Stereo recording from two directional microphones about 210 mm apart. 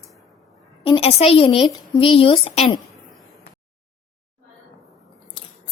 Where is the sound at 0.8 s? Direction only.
25° left (ahead or behind).